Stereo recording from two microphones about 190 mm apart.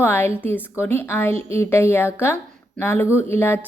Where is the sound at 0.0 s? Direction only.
10° left (ahead or behind).